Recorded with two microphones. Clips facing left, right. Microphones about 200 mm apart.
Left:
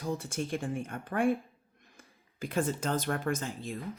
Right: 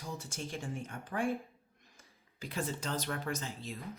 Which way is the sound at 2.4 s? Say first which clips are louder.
Left 7 dB; 50° left (ahead or behind).